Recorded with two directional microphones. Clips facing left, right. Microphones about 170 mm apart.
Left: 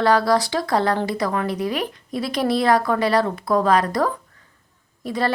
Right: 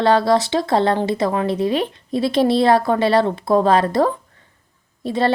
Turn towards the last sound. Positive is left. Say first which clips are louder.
# right 4 dB
turn(degrees=-25)  # may be behind; listen again after turning